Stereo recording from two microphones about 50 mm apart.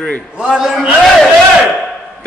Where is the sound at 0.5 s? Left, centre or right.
Centre.